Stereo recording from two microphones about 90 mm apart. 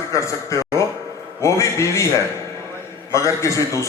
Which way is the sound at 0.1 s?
35° left (ahead or behind).